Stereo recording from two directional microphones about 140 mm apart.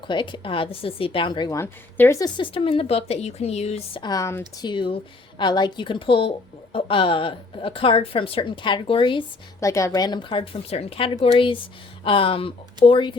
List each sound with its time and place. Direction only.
0.1 s a woman's voice: 35° left (ahead or behind)
1.5 s a woman's voice: 15° left (ahead or behind)
2.2 s speech: 35° left (ahead or behind)
4.0 s speech: 25° left (ahead or behind)
4.6 s a woman's voice: 35° left (ahead or behind)
9.6 s a woman's voice: 20° left (ahead or behind)